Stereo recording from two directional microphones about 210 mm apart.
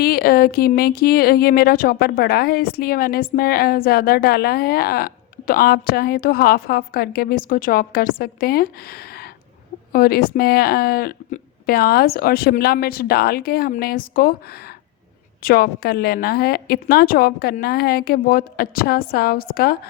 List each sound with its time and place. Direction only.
0.0 s speech: 45° left (ahead or behind)
9.9 s speech: 45° left (ahead or behind)
15.4 s speech: 45° left (ahead or behind)